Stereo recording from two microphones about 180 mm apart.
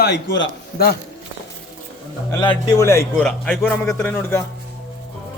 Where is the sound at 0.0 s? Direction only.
70° left (ahead or behind).